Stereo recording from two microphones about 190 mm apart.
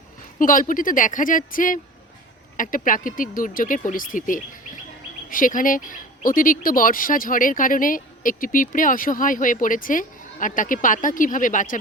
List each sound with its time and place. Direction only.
0.3 s speech: 45° left (ahead or behind)